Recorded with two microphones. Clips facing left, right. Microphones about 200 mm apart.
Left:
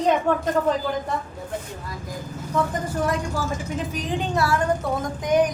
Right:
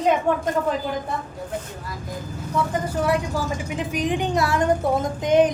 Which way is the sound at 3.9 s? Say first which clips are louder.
Right 5 dB; 15° right (ahead or behind).